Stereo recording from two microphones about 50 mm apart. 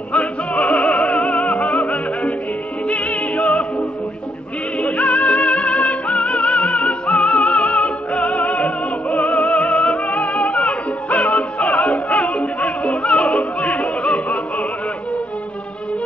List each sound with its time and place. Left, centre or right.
0.1 s music: left
4.7 s music: left